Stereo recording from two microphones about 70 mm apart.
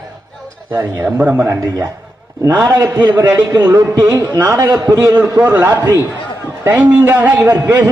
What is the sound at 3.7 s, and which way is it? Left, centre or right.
Speech, right.